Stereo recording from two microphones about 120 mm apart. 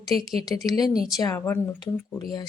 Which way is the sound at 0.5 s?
15° left (ahead or behind).